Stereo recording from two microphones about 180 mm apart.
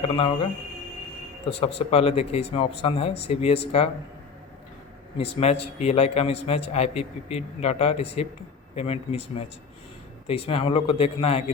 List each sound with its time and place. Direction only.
1.5 s a man's voice: 35° left (ahead or behind)
5.1 s a man's voice: 35° left (ahead or behind)